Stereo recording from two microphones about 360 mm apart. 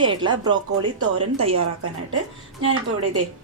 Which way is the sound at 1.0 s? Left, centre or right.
Right.